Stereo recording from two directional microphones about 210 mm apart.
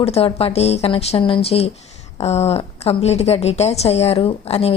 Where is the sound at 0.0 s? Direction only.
30° left (ahead or behind).